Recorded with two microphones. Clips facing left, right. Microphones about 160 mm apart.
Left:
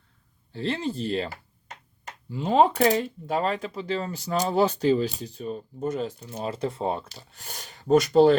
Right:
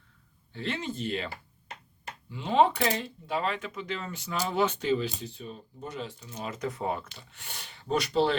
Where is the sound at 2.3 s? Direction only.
40° left (ahead or behind).